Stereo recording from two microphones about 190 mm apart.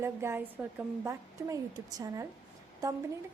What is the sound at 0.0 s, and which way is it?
A woman's voice, 15° right (ahead or behind).